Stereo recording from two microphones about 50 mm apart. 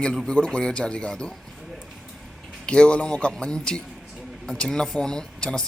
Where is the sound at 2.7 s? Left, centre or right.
Left.